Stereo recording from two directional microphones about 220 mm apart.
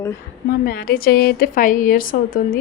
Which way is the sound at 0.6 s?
45° left (ahead or behind).